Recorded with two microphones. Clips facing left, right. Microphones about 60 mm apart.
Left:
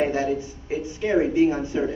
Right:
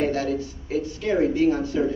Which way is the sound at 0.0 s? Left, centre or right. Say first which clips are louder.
Left 1 dB; centre.